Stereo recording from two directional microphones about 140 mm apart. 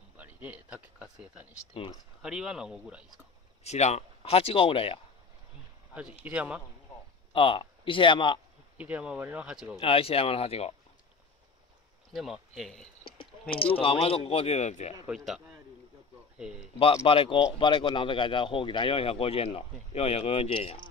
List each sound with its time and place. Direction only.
0.2 s a sound: 10° right (ahead or behind)
1.1 s speech: 10° right (ahead or behind)
1.7 s speech: 40° left (ahead or behind)
2.2 s speech: 5° right (ahead or behind)
3.6 s speech: 50° left (ahead or behind)
6.2 s speech: 10° right (ahead or behind)
7.3 s speech: 40° left (ahead or behind)
8.7 s speech: 10° right (ahead or behind)
9.8 s speech: 40° left (ahead or behind)
12.1 s speech: centre (ahead or behind)
13.7 s speech: 40° left (ahead or behind)
15.0 s speech: centre (ahead or behind)
16.7 s speech: 40° left (ahead or behind)